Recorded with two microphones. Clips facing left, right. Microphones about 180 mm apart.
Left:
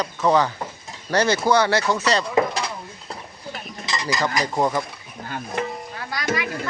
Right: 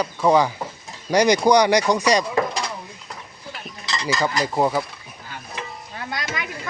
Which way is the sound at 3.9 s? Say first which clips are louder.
Right 1 dB; 15° left (ahead or behind).